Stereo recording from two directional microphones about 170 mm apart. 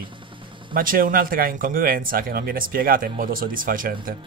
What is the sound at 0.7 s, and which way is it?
Speech, 55° right (ahead or behind).